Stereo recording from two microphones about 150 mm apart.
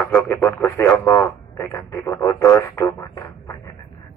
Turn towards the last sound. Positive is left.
turn(degrees=20)  # may be behind; listen again after turning